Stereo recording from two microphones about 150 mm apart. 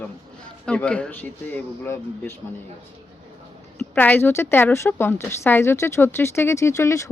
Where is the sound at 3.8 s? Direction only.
10° left (ahead or behind).